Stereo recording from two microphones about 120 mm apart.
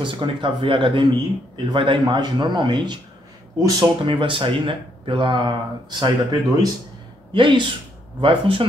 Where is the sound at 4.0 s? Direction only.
45° right (ahead or behind).